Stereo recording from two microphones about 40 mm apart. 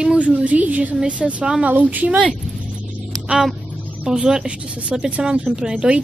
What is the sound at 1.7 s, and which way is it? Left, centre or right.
Speech, right.